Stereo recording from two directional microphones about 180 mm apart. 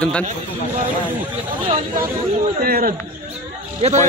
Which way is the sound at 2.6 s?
55° right (ahead or behind).